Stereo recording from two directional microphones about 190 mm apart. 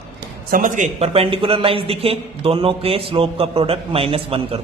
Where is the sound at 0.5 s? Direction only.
40° right (ahead or behind).